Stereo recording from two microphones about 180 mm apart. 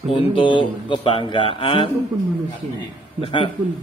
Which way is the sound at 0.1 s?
30° left (ahead or behind).